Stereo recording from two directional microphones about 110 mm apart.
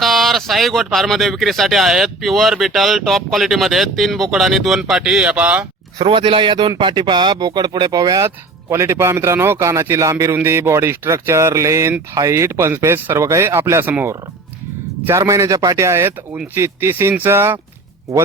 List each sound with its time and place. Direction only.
0.0 s speech: centre (ahead or behind)
6.0 s speech: 50° right (ahead or behind); by 17.6 s 20° right (ahead or behind)